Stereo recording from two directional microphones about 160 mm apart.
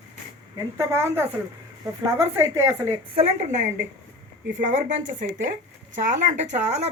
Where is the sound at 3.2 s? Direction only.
45° right (ahead or behind).